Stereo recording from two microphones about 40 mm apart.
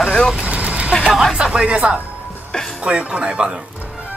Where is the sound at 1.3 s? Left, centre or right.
Centre.